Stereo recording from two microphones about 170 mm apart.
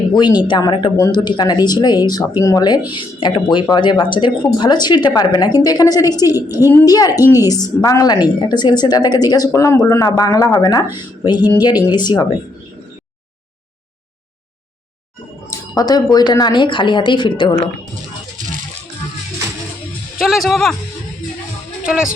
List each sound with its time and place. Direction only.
0.1 s a woman's voice: 25° left (ahead or behind)
15.4 s speech: 20° left (ahead or behind)
20.1 s speech: centre (ahead or behind)
21.8 s speech: 5° right (ahead or behind)